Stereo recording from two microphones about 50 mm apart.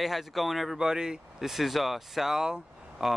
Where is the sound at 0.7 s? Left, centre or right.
Centre.